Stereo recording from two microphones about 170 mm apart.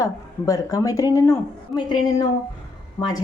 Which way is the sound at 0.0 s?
20° left (ahead or behind).